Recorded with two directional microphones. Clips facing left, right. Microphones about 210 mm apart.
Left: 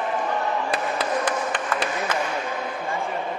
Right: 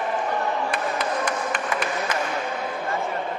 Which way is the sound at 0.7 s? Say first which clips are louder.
Left 1 dB; 35° left (ahead or behind).